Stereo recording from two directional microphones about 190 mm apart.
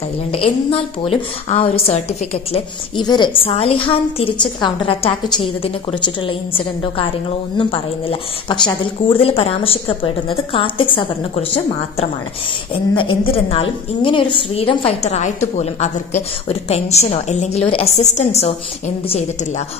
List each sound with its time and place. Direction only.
0.3 s a woman's voice: 30° left (ahead or behind)